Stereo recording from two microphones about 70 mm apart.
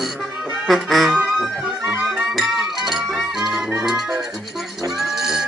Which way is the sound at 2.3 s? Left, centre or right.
Centre.